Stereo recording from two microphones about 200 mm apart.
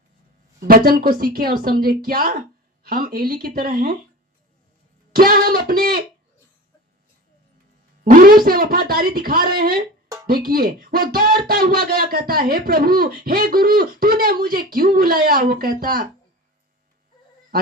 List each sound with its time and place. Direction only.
0.7 s speech: 45° right (ahead or behind)
5.1 s speech: 50° right (ahead or behind)
8.1 s speech: 45° right (ahead or behind)